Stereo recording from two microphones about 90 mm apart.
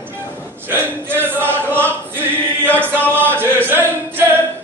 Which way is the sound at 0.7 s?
25° right (ahead or behind).